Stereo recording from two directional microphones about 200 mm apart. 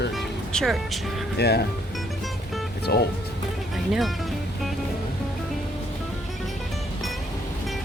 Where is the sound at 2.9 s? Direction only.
50° left (ahead or behind).